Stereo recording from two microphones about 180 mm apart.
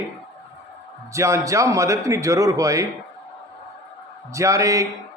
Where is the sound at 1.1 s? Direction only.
15° right (ahead or behind).